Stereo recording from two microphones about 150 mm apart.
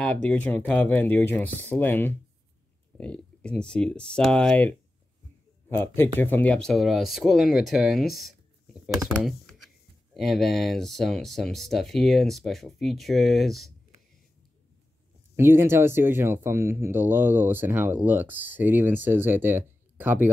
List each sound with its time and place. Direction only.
0.0 s speech: 10° left (ahead or behind)
9.2 s computer keyboard: centre (ahead or behind)
10.1 s speech: centre (ahead or behind)
15.3 s speech: 15° right (ahead or behind)